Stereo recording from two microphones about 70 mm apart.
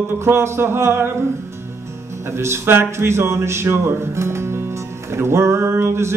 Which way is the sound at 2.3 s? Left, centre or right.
Right.